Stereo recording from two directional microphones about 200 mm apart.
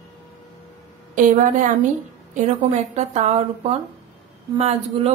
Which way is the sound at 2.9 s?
35° right (ahead or behind).